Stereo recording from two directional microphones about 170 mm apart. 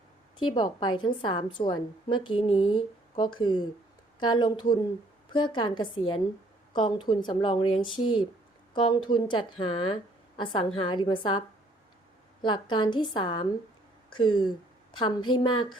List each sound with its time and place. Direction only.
0.3 s a woman's voice: 25° left (ahead or behind)